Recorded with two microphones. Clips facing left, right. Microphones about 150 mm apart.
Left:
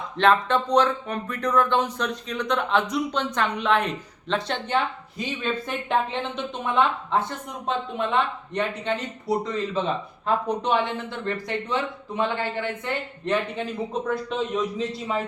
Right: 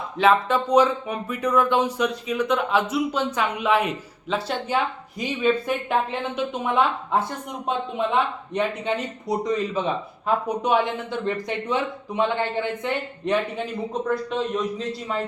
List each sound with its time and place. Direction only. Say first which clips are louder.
0.2 s speech: right 1 dB; 5° right (ahead or behind)
14.1 s a man's voice: right 3 dB; centre (ahead or behind)